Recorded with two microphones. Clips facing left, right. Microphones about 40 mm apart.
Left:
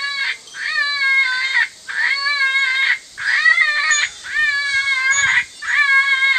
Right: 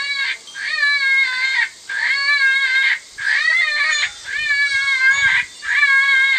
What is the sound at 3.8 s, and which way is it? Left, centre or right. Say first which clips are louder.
Cat: left 1 dB; centre.